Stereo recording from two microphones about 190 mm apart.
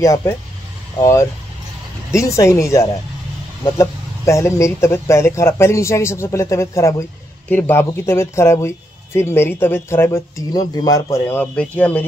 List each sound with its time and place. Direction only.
0.0 s speech: 15° left (ahead or behind)